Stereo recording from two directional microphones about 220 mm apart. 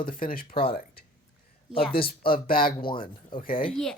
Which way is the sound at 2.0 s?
40° left (ahead or behind).